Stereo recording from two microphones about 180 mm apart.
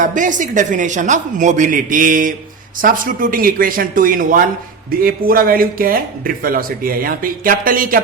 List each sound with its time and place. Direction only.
0.0 s a man's voice: 45° right (ahead or behind)